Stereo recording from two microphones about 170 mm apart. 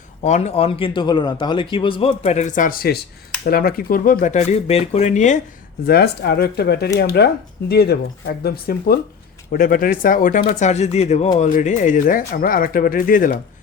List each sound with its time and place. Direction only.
0.2 s speech: 40° left (ahead or behind)
5.8 s speech: 70° left (ahead or behind)